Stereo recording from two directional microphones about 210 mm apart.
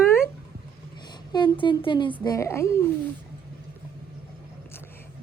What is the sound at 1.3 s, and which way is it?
A child's voice, 20° left (ahead or behind).